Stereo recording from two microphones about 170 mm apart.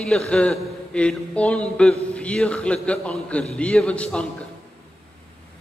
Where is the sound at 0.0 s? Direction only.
5° left (ahead or behind).